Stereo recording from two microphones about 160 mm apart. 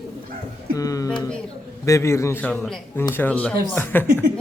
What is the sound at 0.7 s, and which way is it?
A man's voice, 20° left (ahead or behind).